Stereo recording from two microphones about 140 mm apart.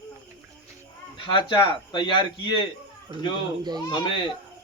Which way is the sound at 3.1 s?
35° right (ahead or behind).